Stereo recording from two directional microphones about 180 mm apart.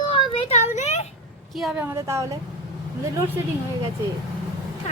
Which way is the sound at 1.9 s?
15° right (ahead or behind).